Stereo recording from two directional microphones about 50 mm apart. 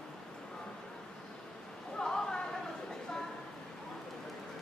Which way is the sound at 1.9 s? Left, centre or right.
Centre.